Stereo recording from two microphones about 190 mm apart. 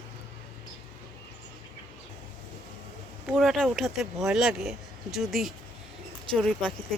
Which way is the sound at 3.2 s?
Centre (ahead or behind).